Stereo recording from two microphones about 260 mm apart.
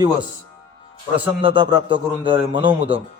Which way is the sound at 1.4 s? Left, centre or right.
Centre.